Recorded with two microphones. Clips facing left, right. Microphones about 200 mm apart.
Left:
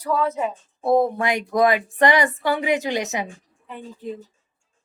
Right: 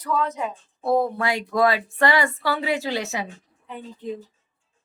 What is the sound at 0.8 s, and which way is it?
Speech, 20° left (ahead or behind).